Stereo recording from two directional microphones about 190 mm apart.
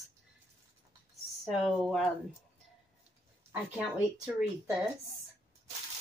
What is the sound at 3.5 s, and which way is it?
Speech, 10° right (ahead or behind).